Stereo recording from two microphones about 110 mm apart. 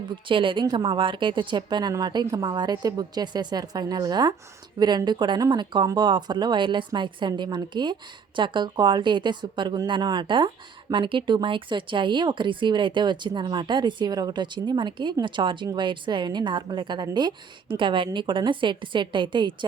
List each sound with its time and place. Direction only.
0.1 s a woman's voice: 50° right (ahead or behind)